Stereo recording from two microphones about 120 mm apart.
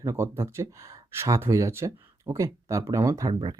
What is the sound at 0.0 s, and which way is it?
Speech, 25° right (ahead or behind).